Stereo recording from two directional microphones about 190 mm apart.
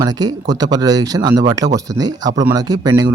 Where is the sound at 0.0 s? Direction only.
20° right (ahead or behind).